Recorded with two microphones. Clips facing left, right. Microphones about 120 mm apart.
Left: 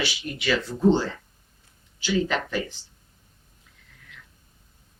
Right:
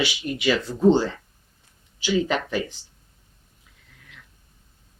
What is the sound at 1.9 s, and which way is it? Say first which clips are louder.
Speech: right 2 dB; 15° right (ahead or behind).